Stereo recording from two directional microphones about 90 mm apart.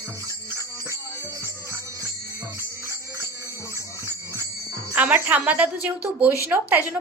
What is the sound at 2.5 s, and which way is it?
Music, 30° left (ahead or behind).